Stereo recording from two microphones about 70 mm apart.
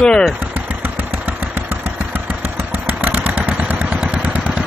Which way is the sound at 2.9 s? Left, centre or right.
Right.